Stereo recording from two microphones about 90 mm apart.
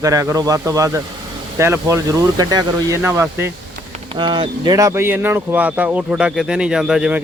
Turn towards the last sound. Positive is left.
turn(degrees=-5)  # may be behind; listen again after turning